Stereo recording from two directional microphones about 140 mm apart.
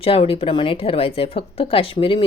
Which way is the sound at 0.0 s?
40° left (ahead or behind).